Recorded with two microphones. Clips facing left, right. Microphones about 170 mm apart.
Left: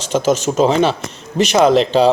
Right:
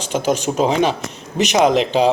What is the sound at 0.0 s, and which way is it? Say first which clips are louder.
Speech: left 3 dB; 10° right (ahead or behind).